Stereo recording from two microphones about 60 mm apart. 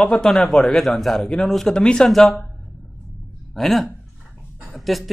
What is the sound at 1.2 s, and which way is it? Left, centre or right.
Speech, centre.